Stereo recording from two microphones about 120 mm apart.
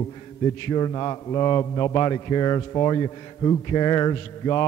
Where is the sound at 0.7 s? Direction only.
35° left (ahead or behind).